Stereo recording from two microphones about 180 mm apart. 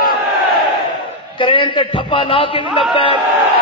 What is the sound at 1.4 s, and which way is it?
A man's voice, 30° left (ahead or behind).